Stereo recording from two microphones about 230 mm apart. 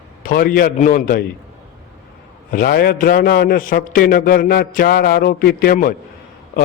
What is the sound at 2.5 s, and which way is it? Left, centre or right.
A man's voice, left.